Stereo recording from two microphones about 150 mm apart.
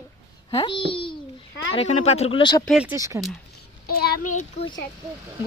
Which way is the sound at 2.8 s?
20° right (ahead or behind).